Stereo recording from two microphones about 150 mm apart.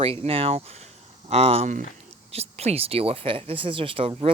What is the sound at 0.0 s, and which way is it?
Speech, 40° right (ahead or behind).